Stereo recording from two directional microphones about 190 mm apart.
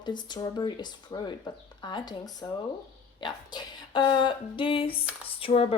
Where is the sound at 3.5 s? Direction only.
20° left (ahead or behind).